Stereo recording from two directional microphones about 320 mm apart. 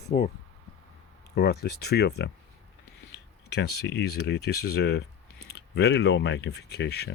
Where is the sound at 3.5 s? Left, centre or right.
Left.